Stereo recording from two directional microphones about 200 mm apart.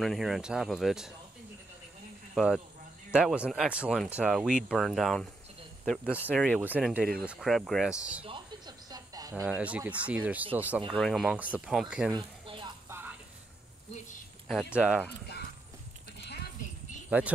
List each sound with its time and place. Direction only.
0.0 s speech: centre (ahead or behind)
2.3 s speech: centre (ahead or behind)
8.3 s a sound: 20° right (ahead or behind)
9.3 s speech: 5° right (ahead or behind)
12.1 s a sound: 25° right (ahead or behind)
12.8 s music: 10° right (ahead or behind)
14.5 s speech: centre (ahead or behind)
16.2 s a sound: 55° left (ahead or behind)
17.1 s speech: 5° right (ahead or behind)